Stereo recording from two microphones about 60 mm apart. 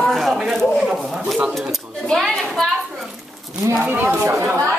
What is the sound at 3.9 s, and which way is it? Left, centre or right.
Speech, right.